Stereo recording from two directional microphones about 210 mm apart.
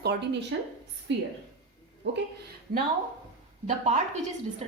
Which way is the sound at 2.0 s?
55° right (ahead or behind).